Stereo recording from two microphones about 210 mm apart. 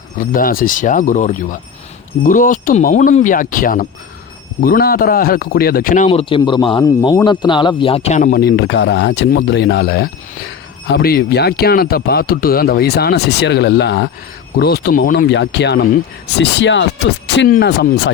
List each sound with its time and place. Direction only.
0.2 s a man's voice: 40° left (ahead or behind)
8.4 s speech: 55° left (ahead or behind)